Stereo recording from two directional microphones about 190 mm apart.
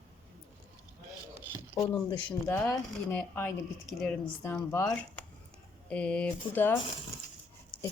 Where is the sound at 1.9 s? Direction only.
10° left (ahead or behind).